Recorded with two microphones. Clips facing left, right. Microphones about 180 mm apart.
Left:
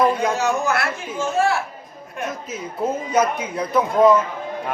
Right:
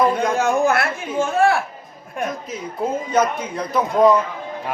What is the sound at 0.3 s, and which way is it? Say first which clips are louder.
Speech: right 3 dB; 55° right (ahead or behind).